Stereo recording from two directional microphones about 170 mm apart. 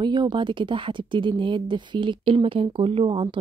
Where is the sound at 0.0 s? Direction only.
25° right (ahead or behind).